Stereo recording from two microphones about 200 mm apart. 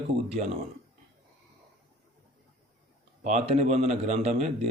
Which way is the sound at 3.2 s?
35° right (ahead or behind).